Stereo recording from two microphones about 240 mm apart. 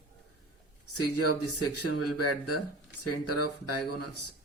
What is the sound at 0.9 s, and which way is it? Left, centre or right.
Speech, left.